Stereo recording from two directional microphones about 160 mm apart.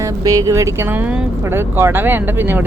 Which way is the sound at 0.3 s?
20° right (ahead or behind).